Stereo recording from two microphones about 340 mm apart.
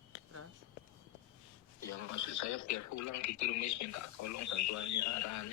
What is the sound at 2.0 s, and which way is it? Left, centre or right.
Speech, left.